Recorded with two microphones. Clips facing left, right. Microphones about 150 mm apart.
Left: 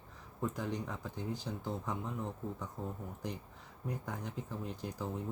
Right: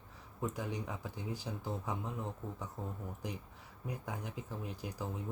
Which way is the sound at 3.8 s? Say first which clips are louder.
Left 1 dB; 10° right (ahead or behind).